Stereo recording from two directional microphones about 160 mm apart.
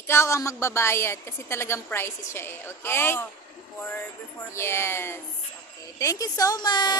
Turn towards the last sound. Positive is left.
turn(degrees=25)  # may be behind; listen again after turning